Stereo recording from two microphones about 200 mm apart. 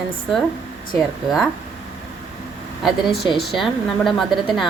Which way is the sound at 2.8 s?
Centre (ahead or behind).